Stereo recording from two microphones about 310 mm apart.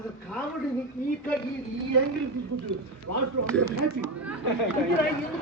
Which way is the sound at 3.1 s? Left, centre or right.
Right.